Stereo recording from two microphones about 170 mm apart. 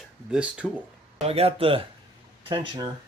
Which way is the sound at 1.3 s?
35° right (ahead or behind).